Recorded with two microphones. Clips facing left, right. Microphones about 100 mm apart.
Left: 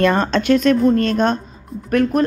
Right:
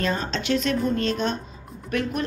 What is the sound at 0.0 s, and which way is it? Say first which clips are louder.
A woman's voice: left 10 dB; 65° left (ahead or behind).